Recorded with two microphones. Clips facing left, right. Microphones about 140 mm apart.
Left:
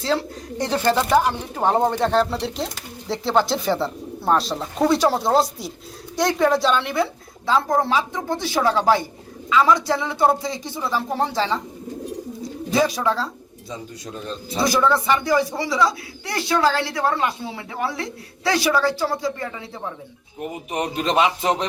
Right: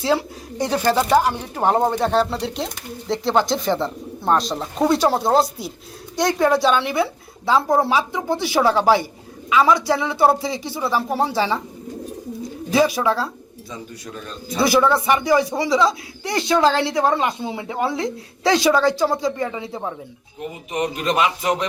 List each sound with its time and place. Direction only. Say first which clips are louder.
0.0 s a woman's voice: right 2 dB; 10° right (ahead or behind)
12.7 s a woman's voice: right 3 dB; 5° right (ahead or behind)
14.6 s speech: right 2 dB; 10° right (ahead or behind)
20.7 s a man's voice: right 1 dB; 30° left (ahead or behind)